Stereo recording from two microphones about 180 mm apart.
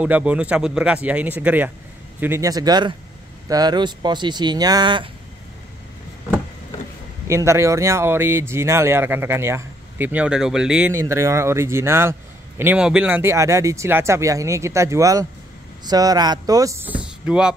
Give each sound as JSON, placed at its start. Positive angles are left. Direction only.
{"t": 0.0, "sound": "speech", "side_deg": -5}
{"t": 7.2, "sound": "speech", "side_deg": -15}